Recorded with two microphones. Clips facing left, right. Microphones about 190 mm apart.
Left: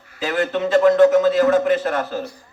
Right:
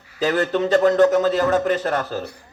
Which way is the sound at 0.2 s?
40° right (ahead or behind).